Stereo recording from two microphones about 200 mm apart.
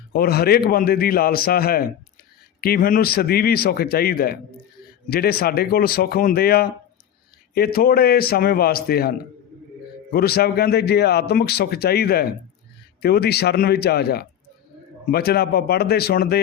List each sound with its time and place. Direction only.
0.1 s speech: 50° left (ahead or behind)